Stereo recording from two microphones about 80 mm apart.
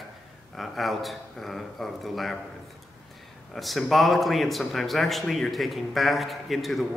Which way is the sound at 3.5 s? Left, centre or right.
Centre.